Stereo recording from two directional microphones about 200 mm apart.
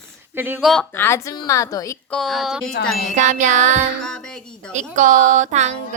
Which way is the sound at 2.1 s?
Centre (ahead or behind).